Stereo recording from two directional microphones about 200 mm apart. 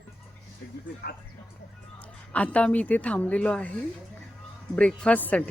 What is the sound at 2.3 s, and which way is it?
Speech, 5° left (ahead or behind).